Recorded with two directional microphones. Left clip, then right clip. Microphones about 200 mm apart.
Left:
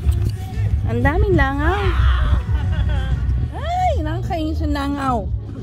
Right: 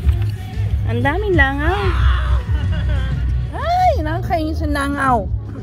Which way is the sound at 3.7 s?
20° left (ahead or behind).